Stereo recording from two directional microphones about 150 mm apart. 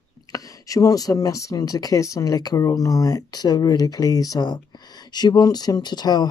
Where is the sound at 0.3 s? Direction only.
25° left (ahead or behind).